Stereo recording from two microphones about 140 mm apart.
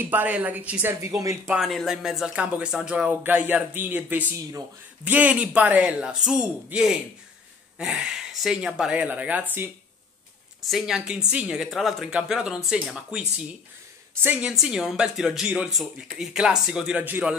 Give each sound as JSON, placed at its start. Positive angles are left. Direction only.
{"t": 0.1, "sound": "speech", "side_deg": -10}
{"t": 1.0, "sound": "speech", "side_deg": -20}
{"t": 1.5, "sound": "speech", "side_deg": 0}
{"t": 10.7, "sound": "speech", "side_deg": -5}
{"t": 14.2, "sound": "speech", "side_deg": -10}